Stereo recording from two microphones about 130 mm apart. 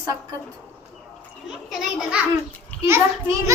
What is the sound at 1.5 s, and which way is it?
Speech, 5° right (ahead or behind).